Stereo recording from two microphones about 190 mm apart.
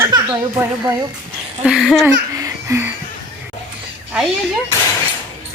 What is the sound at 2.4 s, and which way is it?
Music, 15° right (ahead or behind).